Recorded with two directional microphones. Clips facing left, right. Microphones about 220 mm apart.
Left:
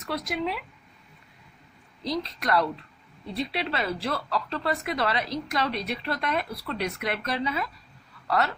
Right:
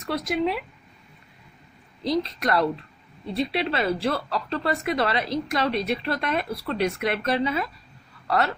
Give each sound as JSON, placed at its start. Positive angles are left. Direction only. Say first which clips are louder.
{"t": 0.1, "sound": "speech", "louder": "right 5 dB", "side_deg": -25}
{"t": 2.0, "sound": "speech", "louder": "right 4 dB", "side_deg": -25}